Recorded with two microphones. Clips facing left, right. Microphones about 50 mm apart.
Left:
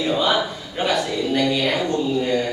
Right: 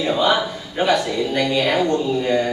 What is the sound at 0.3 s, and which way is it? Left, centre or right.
A man's voice, centre.